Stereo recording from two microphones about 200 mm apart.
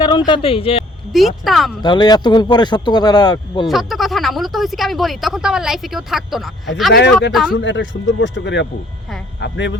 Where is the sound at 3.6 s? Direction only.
Centre (ahead or behind).